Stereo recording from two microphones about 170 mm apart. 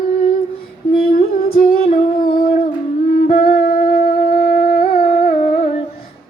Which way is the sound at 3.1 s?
60° left (ahead or behind).